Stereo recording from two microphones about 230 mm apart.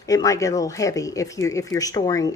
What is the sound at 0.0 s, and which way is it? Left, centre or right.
Speech, centre.